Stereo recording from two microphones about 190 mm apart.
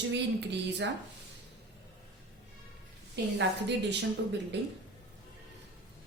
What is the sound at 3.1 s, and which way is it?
A woman's voice, 65° right (ahead or behind).